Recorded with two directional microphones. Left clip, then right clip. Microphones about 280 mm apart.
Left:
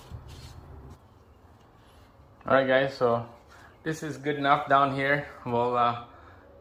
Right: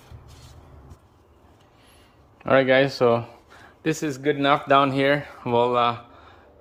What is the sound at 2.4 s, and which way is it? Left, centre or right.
Speech, right.